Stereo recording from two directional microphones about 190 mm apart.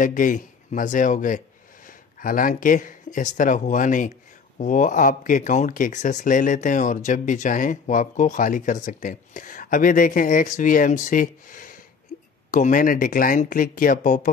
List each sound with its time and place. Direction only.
0.0 s speech: 45° left (ahead or behind)